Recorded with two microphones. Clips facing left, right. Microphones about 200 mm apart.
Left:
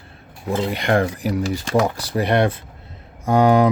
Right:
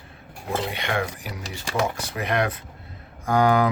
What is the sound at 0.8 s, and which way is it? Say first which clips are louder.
Speech: left 8 dB; 40° left (ahead or behind).